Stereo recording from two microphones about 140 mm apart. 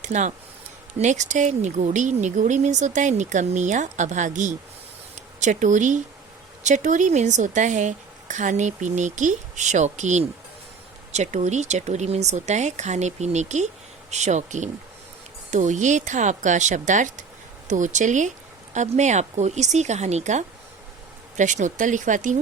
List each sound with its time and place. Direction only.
0.0 s speech: 55° right (ahead or behind)